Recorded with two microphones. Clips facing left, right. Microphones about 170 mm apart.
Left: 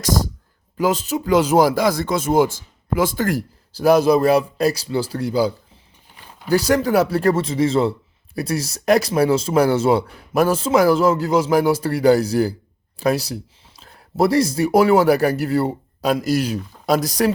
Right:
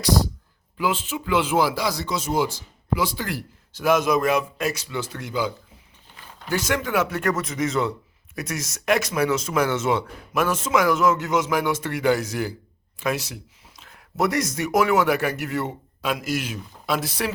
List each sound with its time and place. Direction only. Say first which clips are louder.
0.0 s speech: left 1 dB; 45° left (ahead or behind)